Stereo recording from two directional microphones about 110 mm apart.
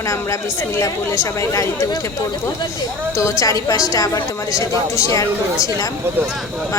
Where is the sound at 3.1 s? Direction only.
30° left (ahead or behind).